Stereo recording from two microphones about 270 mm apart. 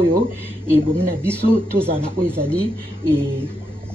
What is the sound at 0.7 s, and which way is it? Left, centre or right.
Speech, centre.